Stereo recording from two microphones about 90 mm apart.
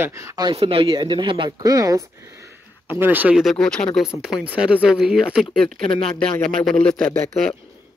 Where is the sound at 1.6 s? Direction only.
40° right (ahead or behind).